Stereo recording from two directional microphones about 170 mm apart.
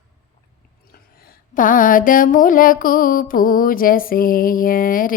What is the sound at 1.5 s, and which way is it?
Mantra, 55° left (ahead or behind).